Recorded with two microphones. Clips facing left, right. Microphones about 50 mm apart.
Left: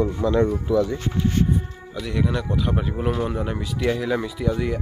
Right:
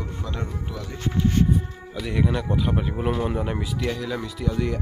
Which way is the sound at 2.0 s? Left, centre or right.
Centre.